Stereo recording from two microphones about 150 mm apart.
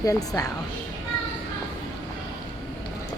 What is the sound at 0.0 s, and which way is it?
Speech, 25° left (ahead or behind).